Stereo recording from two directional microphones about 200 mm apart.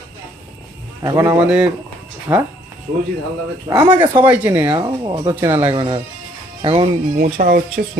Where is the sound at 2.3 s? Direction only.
20° right (ahead or behind).